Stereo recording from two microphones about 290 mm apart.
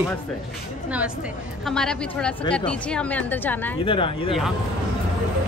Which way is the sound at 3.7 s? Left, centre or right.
Centre.